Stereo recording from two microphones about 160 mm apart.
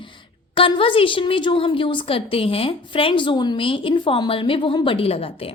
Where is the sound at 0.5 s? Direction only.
35° left (ahead or behind).